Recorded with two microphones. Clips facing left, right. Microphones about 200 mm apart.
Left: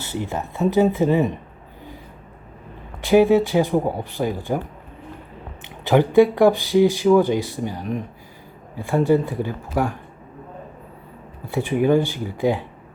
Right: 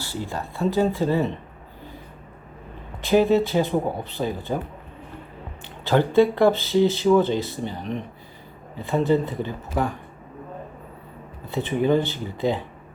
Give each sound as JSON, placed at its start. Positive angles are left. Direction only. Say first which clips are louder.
{"t": 0.0, "sound": "speech", "louder": "left 3 dB", "side_deg": 20}
{"t": 3.0, "sound": "speech", "louder": "left 3 dB", "side_deg": 15}
{"t": 5.6, "sound": "speech", "louder": "left 3 dB", "side_deg": 15}
{"t": 11.4, "sound": "speech", "louder": "left 3 dB", "side_deg": 10}